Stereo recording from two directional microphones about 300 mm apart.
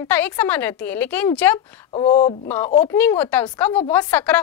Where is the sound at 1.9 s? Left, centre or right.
Centre.